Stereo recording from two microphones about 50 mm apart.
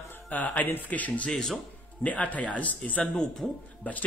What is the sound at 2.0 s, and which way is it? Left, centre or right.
Speech, left.